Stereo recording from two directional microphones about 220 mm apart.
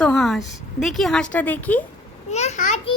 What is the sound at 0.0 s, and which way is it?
A woman's voice, centre (ahead or behind).